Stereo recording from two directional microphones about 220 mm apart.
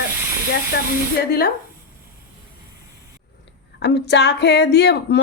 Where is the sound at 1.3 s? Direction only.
45° left (ahead or behind).